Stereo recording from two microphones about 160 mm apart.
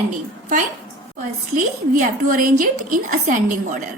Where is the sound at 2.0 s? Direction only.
55° right (ahead or behind).